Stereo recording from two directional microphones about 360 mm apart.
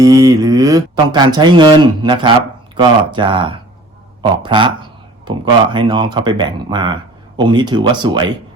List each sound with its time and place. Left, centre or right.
0.0 s speech: centre
4.2 s a sound: centre
5.7 s speech: centre